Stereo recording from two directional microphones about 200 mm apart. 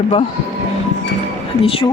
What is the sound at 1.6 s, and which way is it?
Speech, 30° left (ahead or behind).